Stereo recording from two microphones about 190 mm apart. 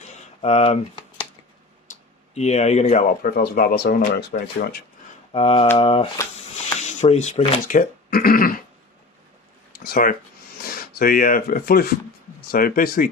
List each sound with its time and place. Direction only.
0.4 s speech: 35° left (ahead or behind)
2.3 s speech: 35° left (ahead or behind)
3.2 s speech: 55° left (ahead or behind)
5.3 s speech: 30° left (ahead or behind); by 8.5 s 50° left (ahead or behind)
9.7 s a sound: 55° left (ahead or behind)
10.6 s speech: 50° left (ahead or behind)